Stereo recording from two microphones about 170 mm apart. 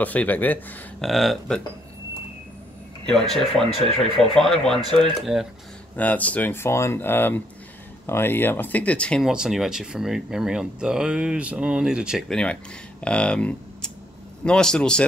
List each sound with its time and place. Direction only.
0.0 s speech: 10° left (ahead or behind)
3.1 s speech: 5° left (ahead or behind)
5.9 s speech: 10° left (ahead or behind)